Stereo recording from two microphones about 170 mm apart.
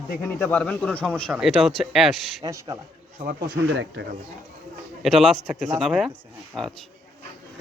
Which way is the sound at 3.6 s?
90° right.